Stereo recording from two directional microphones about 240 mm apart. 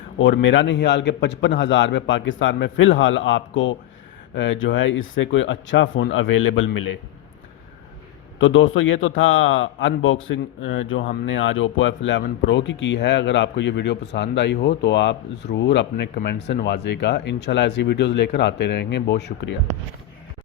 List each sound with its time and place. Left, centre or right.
0.2 s speech: left
8.4 s speech: left